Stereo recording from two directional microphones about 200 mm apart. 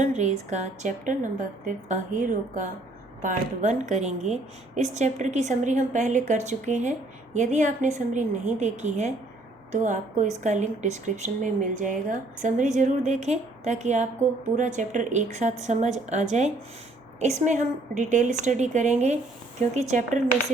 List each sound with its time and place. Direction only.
0.0 s a woman's voice: 35° right (ahead or behind)